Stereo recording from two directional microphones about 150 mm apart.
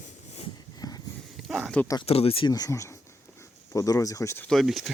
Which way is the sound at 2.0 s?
40° left (ahead or behind).